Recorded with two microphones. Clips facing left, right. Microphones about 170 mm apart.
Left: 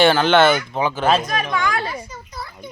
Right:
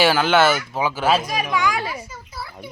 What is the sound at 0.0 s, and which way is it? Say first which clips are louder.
Speech: left 2 dB; 5° right (ahead or behind).